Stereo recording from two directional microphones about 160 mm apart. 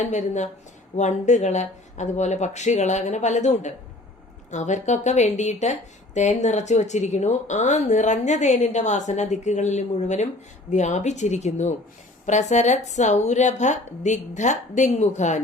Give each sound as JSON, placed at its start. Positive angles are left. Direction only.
{"t": 0.0, "sound": "speech", "side_deg": 50}